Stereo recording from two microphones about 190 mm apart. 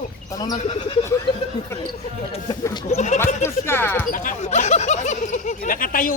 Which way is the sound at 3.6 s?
10° left (ahead or behind).